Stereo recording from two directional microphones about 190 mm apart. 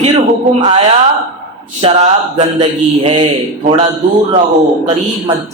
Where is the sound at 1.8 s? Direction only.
35° right (ahead or behind).